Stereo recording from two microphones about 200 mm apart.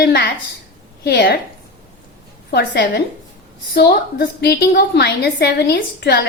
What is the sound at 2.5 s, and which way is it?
A woman's voice, 55° left (ahead or behind).